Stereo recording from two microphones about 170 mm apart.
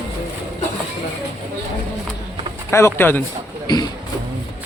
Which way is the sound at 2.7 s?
15° left (ahead or behind).